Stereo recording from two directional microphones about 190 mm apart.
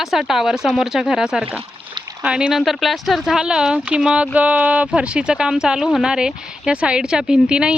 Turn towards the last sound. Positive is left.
turn(degrees=-5)  # may be behind; listen again after turning